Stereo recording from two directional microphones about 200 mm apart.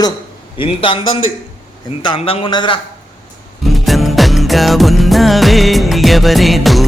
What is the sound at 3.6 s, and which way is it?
Music, centre (ahead or behind).